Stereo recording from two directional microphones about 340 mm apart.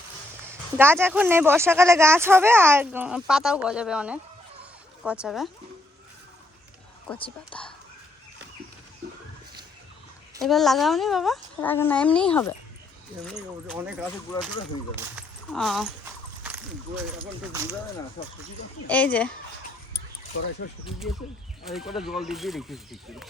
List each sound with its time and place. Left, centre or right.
0.8 s speech: centre
7.1 s speech: centre
10.4 s speech: centre
15.1 s speech: centre
16.4 s a sound: centre
18.2 s speech: centre
18.9 s speech: centre
21.6 s speech: centre